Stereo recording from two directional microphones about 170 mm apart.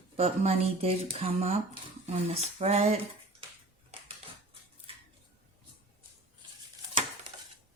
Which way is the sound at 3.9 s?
35° right (ahead or behind).